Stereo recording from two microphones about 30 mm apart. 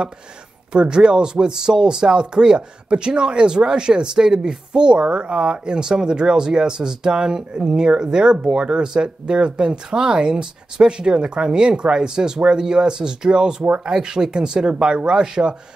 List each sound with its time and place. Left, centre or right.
0.7 s speech: right